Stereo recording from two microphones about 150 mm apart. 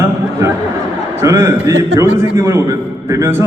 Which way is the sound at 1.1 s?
20° right (ahead or behind).